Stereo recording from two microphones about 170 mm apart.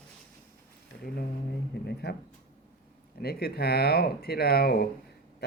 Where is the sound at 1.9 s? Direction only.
75° left (ahead or behind).